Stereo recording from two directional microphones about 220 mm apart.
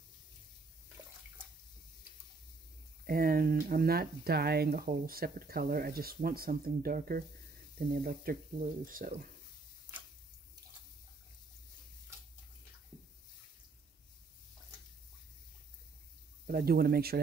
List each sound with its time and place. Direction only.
3.1 s speech: 40° right (ahead or behind)
16.4 s speech: 45° right (ahead or behind)